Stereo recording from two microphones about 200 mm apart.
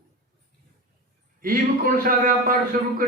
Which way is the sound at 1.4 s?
45° right (ahead or behind).